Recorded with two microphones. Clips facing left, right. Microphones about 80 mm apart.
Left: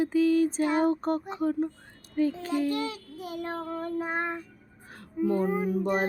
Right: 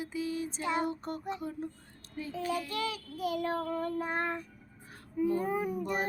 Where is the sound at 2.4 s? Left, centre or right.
Left.